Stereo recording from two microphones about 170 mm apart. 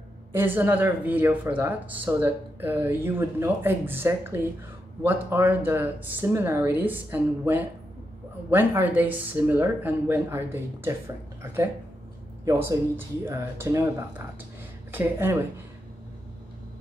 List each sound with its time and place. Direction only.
0.3 s speech: 10° right (ahead or behind)